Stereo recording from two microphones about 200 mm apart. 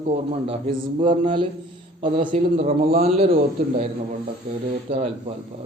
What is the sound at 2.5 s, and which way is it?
Speech, 30° right (ahead or behind).